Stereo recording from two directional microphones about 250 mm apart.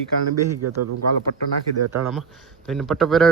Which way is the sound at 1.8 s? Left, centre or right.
Right.